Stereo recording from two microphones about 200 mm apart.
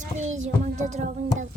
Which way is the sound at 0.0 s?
35° right (ahead or behind).